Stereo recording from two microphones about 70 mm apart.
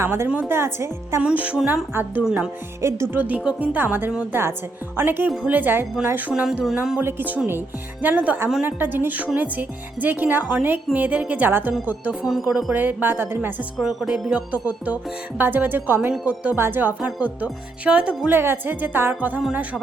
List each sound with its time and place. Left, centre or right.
0.0 s a woman's voice: right
1.2 s a woman's voice: centre
2.2 s music: centre
2.8 s a woman's voice: right
3.2 s a woman's voice: right
6.3 s music: centre
7.0 s a woman's voice: right
12.2 s music: centre
12.7 s a woman's voice: right
13.8 s music: centre
15.4 s a woman's voice: right
16.6 s a woman's voice: right
17.2 s music: centre
18.3 s a woman's voice: right